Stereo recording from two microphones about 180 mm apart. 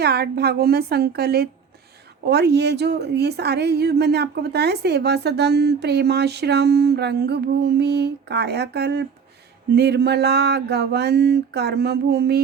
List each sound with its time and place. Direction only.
0.0 s a woman's voice: 60° right (ahead or behind)